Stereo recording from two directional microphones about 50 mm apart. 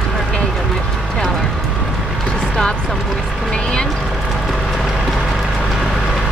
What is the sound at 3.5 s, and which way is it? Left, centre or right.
Vehicle, centre.